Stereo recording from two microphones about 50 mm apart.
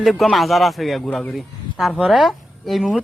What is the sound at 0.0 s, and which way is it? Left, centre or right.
Speech, centre.